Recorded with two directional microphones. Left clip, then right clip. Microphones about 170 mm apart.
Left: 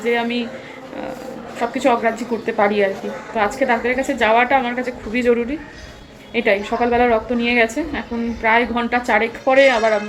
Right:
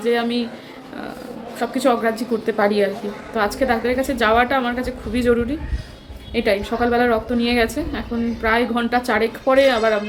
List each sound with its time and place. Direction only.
0.0 s a woman's voice: 15° right (ahead or behind)
1.5 s a woman's voice: 15° right (ahead or behind)